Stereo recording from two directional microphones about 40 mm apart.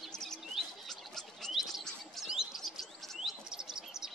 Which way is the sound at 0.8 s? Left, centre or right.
Centre.